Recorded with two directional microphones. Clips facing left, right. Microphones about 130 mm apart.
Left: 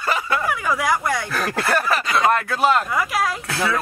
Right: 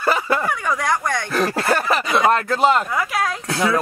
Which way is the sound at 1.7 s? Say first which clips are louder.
Even; 30° right (ahead or behind).